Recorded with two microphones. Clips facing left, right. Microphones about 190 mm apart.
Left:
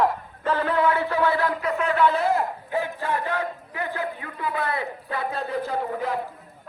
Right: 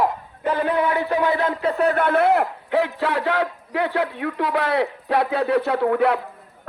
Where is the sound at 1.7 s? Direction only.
40° right (ahead or behind); by 6.2 s 70° right (ahead or behind).